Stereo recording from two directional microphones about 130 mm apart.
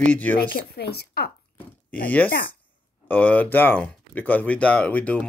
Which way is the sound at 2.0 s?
10° left (ahead or behind).